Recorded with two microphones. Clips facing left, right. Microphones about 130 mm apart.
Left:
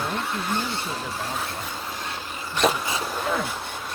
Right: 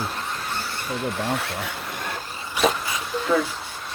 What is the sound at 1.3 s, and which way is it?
Speech, 70° right (ahead or behind).